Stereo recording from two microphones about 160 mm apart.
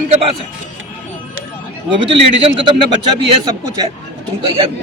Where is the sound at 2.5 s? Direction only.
30° right (ahead or behind).